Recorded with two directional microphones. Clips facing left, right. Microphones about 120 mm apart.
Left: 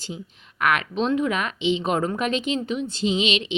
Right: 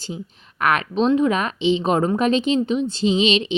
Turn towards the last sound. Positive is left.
turn(degrees=-30)  # may be behind; listen again after turning